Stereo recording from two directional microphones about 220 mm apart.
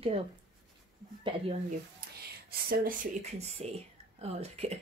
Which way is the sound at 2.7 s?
40° right (ahead or behind).